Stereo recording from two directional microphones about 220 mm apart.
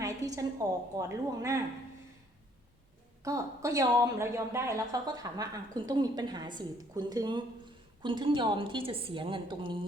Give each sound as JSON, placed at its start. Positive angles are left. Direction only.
{"t": 0.0, "sound": "a sound", "side_deg": -15}
{"t": 0.9, "sound": "a woman's voice", "side_deg": -15}
{"t": 3.2, "sound": "a woman's voice", "side_deg": -15}